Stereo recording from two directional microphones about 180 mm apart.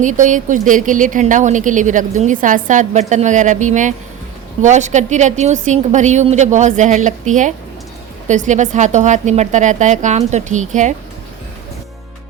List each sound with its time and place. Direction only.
0.0 s a woman's voice: 45° right (ahead or behind)